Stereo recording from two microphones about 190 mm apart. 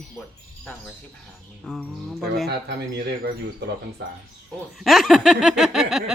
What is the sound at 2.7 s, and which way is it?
Speech, 55° right (ahead or behind).